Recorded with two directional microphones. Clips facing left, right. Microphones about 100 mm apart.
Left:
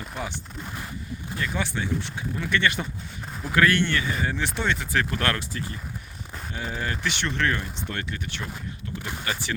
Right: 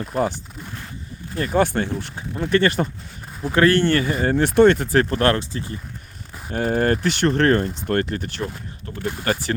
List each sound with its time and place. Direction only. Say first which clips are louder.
1.4 s speech: right 10 dB; 45° right (ahead or behind); by 5.7 s 30° right (ahead or behind)
6.5 s speech: right 12 dB; 50° right (ahead or behind)